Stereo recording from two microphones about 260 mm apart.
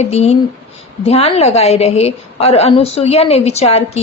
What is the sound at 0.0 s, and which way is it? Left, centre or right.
A woman's voice, left.